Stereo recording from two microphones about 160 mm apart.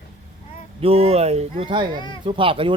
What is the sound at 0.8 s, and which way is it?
Speech, 35° right (ahead or behind).